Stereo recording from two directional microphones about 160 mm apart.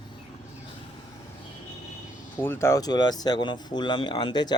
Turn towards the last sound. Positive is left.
turn(degrees=25)  # may be behind; listen again after turning